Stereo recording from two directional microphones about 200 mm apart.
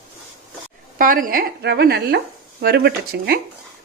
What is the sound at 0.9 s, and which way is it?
Speech, 45° right (ahead or behind).